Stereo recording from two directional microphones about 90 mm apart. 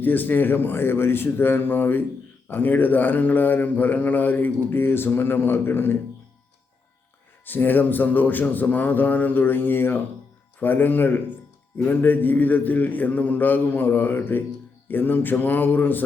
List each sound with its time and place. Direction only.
0.0 s a man's voice: 20° left (ahead or behind)
7.4 s a man's voice: 20° left (ahead or behind)